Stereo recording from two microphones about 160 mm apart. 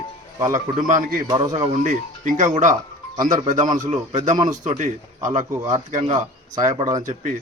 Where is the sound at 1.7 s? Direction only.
55° right (ahead or behind).